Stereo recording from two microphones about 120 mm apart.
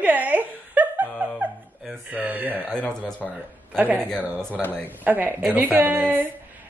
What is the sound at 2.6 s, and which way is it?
Speech, 5° left (ahead or behind).